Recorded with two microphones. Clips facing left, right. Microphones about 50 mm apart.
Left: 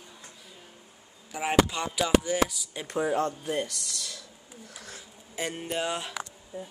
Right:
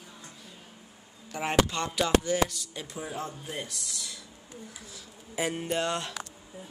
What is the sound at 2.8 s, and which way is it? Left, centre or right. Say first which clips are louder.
Speech: left 11 dB; left.